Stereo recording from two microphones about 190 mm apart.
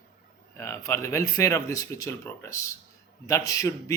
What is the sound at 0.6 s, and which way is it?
Speech, 15° left (ahead or behind).